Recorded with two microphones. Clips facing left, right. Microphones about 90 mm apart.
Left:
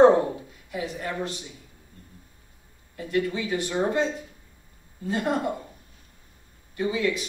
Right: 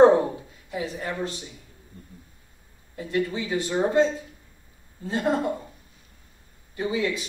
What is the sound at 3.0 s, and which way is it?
A woman's voice, 25° right (ahead or behind).